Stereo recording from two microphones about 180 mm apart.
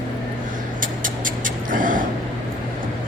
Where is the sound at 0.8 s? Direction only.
50° right (ahead or behind).